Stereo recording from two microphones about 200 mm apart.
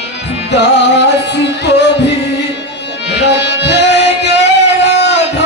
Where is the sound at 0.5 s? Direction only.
60° left (ahead or behind).